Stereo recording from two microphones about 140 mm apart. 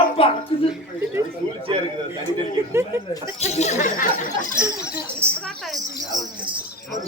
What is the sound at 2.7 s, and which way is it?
Speech, 20° right (ahead or behind).